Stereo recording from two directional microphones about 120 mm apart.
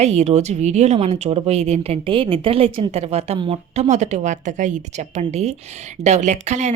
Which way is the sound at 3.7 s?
75° right (ahead or behind).